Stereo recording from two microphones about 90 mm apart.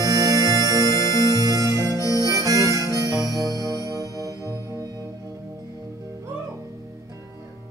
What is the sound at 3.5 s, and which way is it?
Music, 40° right (ahead or behind).